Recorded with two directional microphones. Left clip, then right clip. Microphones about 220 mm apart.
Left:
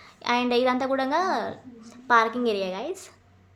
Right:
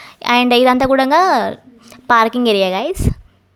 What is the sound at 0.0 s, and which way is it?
A woman's voice, 45° right (ahead or behind).